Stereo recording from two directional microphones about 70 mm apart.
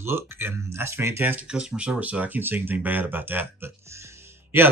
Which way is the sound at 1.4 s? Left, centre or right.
Centre.